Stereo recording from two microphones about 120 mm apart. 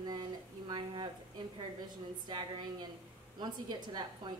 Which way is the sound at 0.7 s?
40° right (ahead or behind).